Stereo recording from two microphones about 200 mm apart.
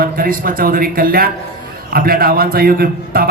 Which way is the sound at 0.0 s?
45° right (ahead or behind).